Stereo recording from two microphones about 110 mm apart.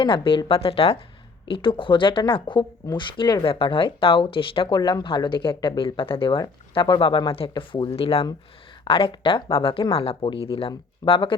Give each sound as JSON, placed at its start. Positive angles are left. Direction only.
{"t": 0.0, "sound": "speech", "side_deg": 50}
{"t": 4.7, "sound": "speech", "side_deg": 40}